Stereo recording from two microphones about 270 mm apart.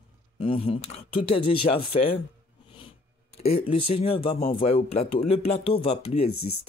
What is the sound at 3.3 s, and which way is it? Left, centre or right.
Speech, left.